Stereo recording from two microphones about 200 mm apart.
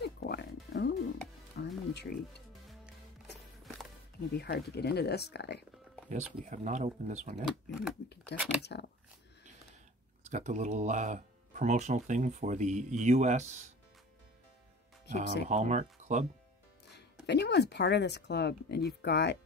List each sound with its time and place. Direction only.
0.0 s music: 55° left (ahead or behind)
4.4 s speech: 55° left (ahead or behind)
6.4 s speech: 40° right (ahead or behind)
7.4 s speech: 5° right (ahead or behind)
8.6 s speech: 55° left (ahead or behind)
10.2 s speech: 35° right (ahead or behind)
15.4 s speech: 35° right (ahead or behind)
17.3 s speech: 60° left (ahead or behind)